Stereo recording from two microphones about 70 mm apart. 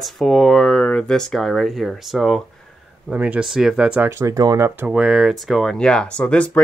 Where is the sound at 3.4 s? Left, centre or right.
Centre.